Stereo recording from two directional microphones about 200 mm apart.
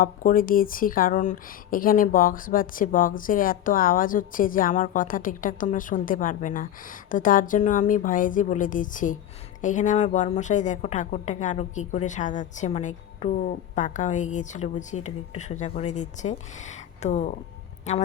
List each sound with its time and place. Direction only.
0.0 s a woman's voice: 45° left (ahead or behind)